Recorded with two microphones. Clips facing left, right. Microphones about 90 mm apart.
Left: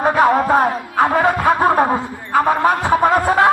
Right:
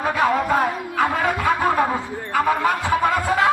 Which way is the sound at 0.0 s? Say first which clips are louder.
Left 6 dB; 40° left (ahead or behind).